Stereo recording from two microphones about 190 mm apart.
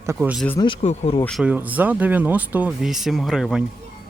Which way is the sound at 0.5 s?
25° left (ahead or behind).